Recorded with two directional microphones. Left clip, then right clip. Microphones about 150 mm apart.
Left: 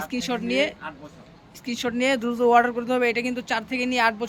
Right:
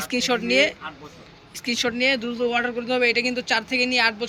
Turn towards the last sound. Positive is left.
turn(degrees=25)  # may be behind; listen again after turning